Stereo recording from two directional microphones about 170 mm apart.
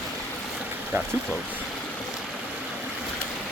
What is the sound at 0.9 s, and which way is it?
Speech, 15° right (ahead or behind).